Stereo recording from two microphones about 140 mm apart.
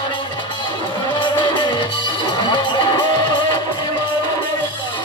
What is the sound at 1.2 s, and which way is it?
Music, 35° left (ahead or behind).